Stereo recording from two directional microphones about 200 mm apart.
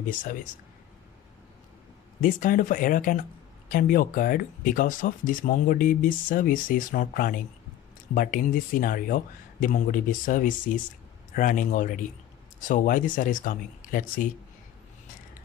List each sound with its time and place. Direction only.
0.1 s speech: 40° left (ahead or behind)
2.2 s speech: 40° left (ahead or behind)